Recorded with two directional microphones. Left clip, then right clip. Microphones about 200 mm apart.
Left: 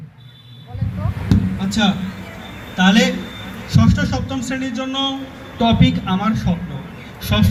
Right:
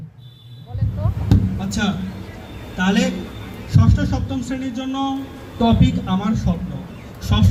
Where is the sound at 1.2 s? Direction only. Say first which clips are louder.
Left 2 dB; 50° left (ahead or behind).